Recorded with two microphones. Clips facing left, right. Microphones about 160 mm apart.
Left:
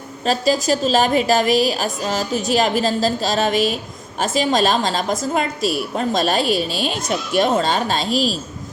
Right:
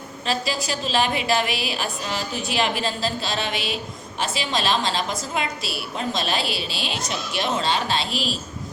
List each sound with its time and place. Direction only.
0.3 s a woman's voice: 40° left (ahead or behind)